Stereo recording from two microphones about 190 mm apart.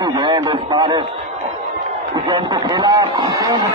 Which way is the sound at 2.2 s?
25° right (ahead or behind).